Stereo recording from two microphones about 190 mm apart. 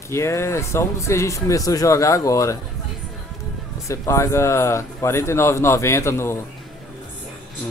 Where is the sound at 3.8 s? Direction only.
15° left (ahead or behind).